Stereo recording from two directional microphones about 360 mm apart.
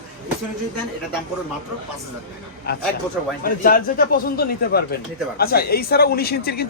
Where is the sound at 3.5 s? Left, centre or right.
Left.